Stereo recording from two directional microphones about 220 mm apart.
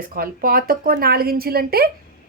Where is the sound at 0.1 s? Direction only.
40° right (ahead or behind).